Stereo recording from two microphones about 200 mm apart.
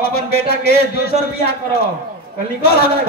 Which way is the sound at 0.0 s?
50° left (ahead or behind).